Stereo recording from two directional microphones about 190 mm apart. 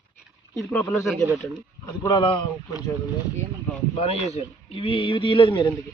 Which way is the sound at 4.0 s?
35° left (ahead or behind).